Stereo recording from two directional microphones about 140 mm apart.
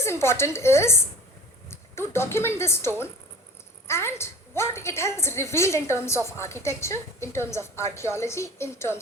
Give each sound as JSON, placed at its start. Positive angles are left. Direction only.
{"t": 0.0, "sound": "a woman's voice", "side_deg": 20}